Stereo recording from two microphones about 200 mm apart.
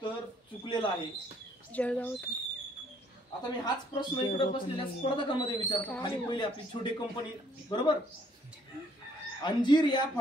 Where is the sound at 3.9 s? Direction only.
25° left (ahead or behind).